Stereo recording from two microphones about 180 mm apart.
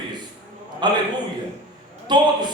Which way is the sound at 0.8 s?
25° right (ahead or behind).